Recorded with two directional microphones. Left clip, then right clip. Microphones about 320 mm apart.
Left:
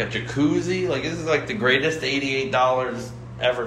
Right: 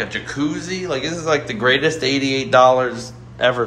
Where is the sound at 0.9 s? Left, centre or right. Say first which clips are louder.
Right 3 dB; centre.